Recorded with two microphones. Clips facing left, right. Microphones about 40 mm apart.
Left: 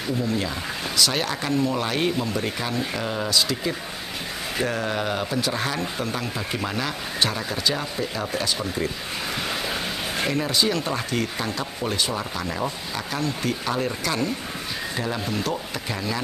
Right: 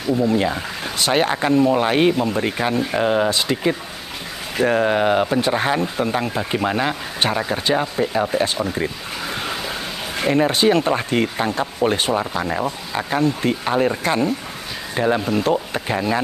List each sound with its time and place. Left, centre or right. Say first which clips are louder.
0.2 s speech: right 7 dB; right
10.3 s speech: right 9 dB; right